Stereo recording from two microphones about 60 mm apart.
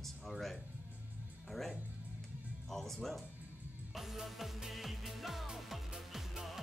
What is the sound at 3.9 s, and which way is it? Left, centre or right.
Music, centre.